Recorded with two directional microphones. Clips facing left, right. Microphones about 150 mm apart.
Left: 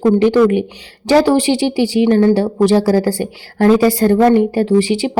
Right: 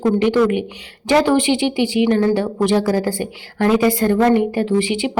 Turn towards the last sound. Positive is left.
turn(degrees=35)  # may be behind; listen again after turning